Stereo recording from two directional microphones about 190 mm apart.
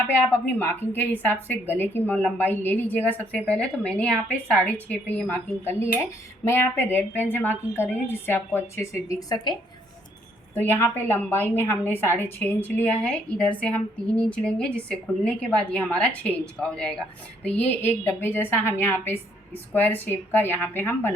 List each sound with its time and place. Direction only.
0.1 s a woman's voice: 10° left (ahead or behind)
10.5 s a woman's voice: 10° left (ahead or behind)